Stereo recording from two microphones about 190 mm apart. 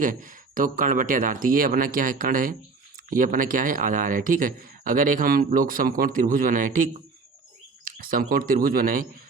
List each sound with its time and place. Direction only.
0.0 s speech: 45° right (ahead or behind)
7.9 s speech: 50° right (ahead or behind)